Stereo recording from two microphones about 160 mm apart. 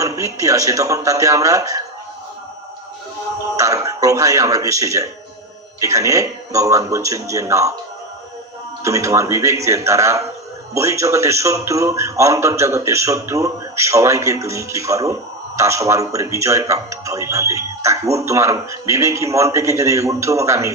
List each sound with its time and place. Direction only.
0.0 s a man's voice: 20° right (ahead or behind)
3.5 s a man's voice: 20° right (ahead or behind)
8.8 s a man's voice: 20° right (ahead or behind)